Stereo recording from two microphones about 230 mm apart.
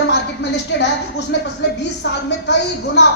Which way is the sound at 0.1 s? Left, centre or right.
Left.